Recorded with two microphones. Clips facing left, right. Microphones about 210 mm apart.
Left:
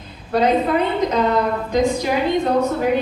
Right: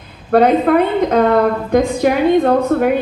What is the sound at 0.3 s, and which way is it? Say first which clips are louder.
A woman's voice: right 6 dB; 55° right (ahead or behind).